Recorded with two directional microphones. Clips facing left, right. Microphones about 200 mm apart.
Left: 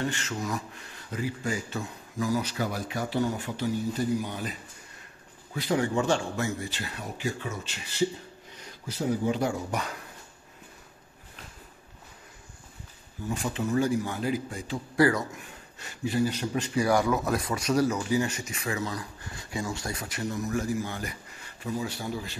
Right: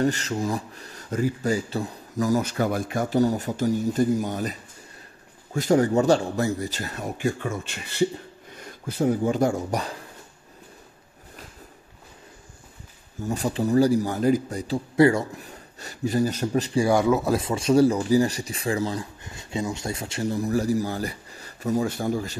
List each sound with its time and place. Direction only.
0.0 s speech: 40° right (ahead or behind)
13.2 s a man's voice: 40° right (ahead or behind)
15.0 s a man's voice: 25° right (ahead or behind); by 22.4 s 45° right (ahead or behind)